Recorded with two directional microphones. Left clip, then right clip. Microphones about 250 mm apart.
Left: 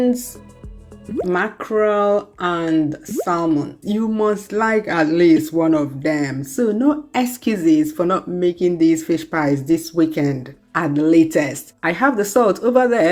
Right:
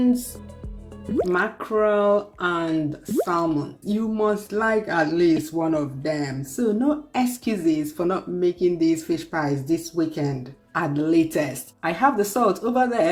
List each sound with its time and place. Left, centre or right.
1.3 s speech: centre